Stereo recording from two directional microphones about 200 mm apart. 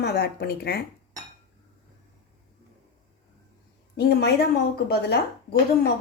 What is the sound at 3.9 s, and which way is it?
A woman's voice, 55° left (ahead or behind).